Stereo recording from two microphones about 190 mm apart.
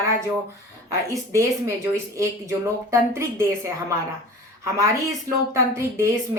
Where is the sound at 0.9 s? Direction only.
15° right (ahead or behind).